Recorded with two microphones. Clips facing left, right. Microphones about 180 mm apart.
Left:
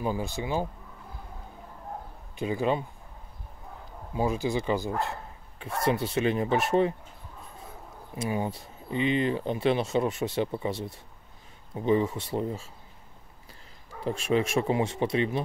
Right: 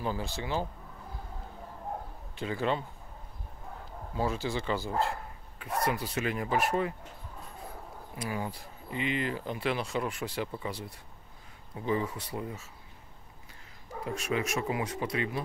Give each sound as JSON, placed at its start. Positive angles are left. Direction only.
{"t": 0.0, "sound": "speech", "side_deg": 15}
{"t": 2.3, "sound": "speech", "side_deg": 15}
{"t": 4.1, "sound": "speech", "side_deg": 15}
{"t": 8.2, "sound": "speech", "side_deg": 25}
{"t": 14.0, "sound": "speech", "side_deg": 30}